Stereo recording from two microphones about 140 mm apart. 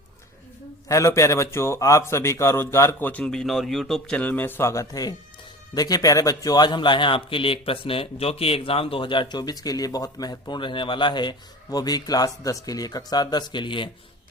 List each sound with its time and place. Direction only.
0.9 s a man's voice: 20° left (ahead or behind)